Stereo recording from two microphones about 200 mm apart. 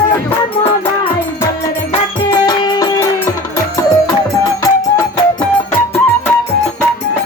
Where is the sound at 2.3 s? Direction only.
20° left (ahead or behind).